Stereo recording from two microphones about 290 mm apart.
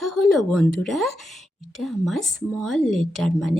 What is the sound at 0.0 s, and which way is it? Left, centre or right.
Speech, centre.